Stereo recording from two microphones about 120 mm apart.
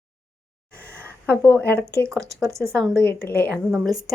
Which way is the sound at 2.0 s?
25° right (ahead or behind).